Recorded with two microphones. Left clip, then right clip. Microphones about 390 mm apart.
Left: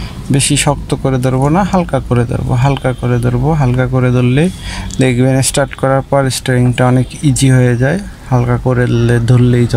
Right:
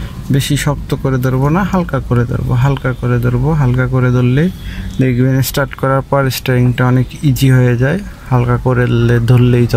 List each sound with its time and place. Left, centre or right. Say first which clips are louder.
0.3 s speech: left 4 dB; centre